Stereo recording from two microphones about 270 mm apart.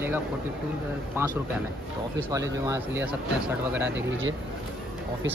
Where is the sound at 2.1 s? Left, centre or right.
Centre.